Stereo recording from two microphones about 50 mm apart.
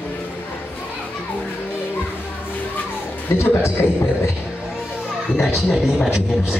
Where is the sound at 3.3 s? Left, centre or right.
Left.